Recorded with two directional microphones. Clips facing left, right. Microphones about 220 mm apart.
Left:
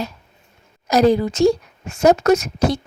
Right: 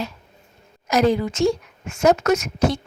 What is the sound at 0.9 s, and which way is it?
A woman's voice, 35° left (ahead or behind).